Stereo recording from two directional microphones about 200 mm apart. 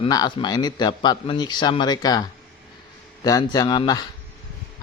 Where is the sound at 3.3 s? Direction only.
20° left (ahead or behind).